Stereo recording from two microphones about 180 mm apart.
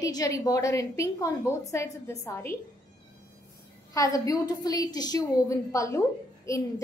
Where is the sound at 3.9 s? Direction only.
20° left (ahead or behind).